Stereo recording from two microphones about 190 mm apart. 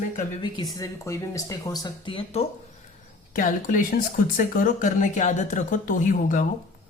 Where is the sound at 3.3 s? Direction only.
45° left (ahead or behind).